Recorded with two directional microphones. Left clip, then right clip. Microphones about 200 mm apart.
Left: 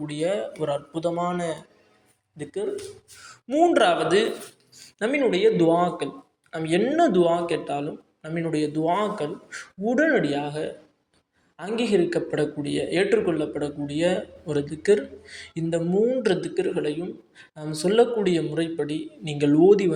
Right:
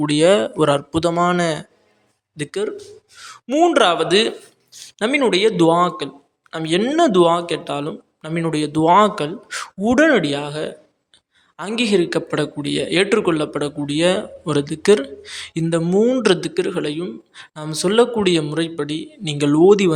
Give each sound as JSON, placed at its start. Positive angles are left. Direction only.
{"t": 0.0, "sound": "a man's voice", "side_deg": -40}